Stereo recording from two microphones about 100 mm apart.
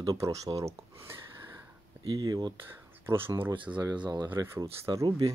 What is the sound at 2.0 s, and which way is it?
Speech, 45° right (ahead or behind).